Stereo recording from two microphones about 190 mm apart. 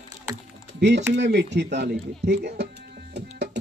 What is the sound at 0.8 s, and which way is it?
Speech, 65° right (ahead or behind).